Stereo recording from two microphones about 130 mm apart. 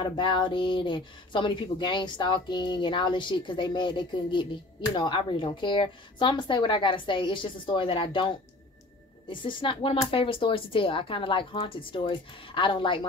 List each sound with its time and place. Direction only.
0.0 s speech: 40° left (ahead or behind)